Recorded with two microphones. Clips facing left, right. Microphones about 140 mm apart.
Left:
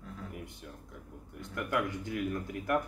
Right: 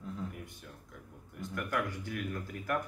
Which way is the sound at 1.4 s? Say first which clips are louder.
Left 2 dB; 20° left (ahead or behind).